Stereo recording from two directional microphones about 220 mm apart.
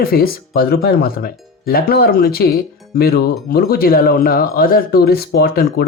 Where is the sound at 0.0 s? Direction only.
45° left (ahead or behind).